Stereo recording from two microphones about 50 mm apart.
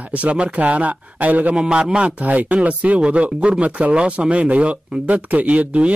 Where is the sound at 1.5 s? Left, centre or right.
Right.